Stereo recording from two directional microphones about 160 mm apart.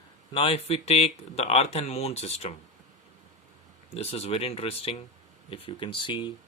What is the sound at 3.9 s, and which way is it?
Speech, 40° left (ahead or behind).